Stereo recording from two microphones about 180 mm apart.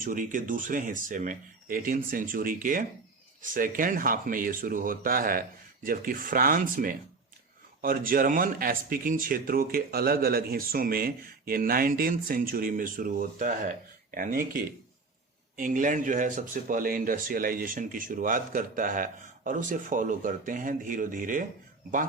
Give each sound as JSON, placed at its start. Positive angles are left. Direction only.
{"t": 0.0, "sound": "speech", "side_deg": -50}